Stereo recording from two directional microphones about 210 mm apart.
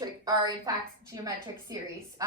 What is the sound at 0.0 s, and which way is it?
A woman's voice, 20° right (ahead or behind).